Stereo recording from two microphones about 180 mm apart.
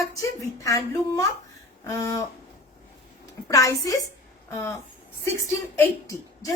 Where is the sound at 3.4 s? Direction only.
20° left (ahead or behind).